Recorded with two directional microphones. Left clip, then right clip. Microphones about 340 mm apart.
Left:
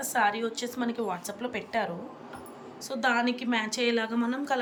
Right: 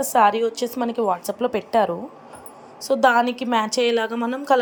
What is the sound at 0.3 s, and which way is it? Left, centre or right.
Speech, centre.